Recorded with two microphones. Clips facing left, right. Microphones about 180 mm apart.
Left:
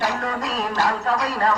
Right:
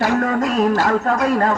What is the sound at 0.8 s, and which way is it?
Speech, 50° right (ahead or behind).